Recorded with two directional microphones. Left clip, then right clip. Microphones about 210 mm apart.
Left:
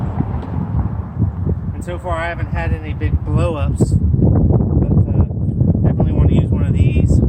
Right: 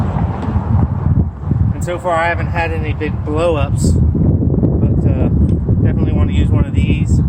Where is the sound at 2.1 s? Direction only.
25° right (ahead or behind).